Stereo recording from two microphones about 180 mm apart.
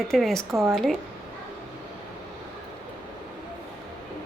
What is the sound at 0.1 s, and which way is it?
Speech, centre (ahead or behind).